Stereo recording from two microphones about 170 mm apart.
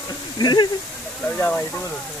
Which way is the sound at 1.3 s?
10° left (ahead or behind).